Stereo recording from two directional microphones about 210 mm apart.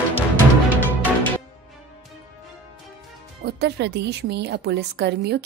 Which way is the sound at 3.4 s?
50° right (ahead or behind).